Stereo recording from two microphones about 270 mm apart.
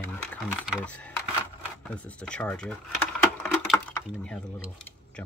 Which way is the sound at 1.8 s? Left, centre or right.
Centre.